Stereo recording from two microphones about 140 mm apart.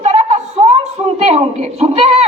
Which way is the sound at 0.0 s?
55° right (ahead or behind).